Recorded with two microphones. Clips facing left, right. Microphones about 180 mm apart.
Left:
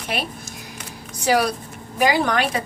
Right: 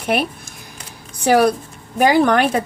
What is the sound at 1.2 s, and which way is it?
A woman's voice, 55° right (ahead or behind).